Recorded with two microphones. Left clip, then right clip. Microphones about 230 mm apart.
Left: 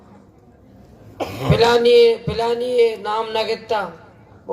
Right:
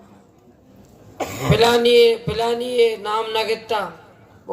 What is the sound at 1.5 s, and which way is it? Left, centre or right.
Speech, right.